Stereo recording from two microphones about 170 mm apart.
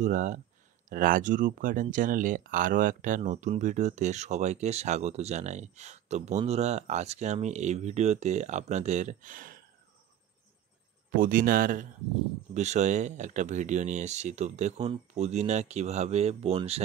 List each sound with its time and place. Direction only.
0.0 s speech: 45° right (ahead or behind)
11.1 s speech: 55° right (ahead or behind); by 16.8 s 35° right (ahead or behind)